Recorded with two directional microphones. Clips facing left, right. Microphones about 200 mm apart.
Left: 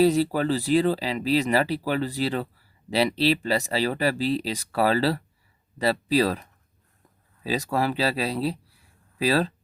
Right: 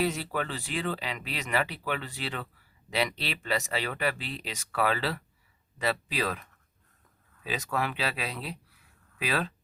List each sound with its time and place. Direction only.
0.0 s speech: 35° left (ahead or behind)
7.4 s speech: 35° left (ahead or behind)